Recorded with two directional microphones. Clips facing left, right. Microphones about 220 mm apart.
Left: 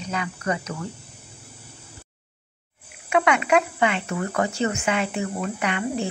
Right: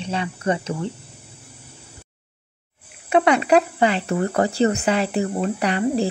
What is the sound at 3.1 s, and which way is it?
Speech, 35° right (ahead or behind).